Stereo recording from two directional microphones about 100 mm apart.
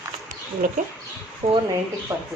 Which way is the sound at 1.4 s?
90° right.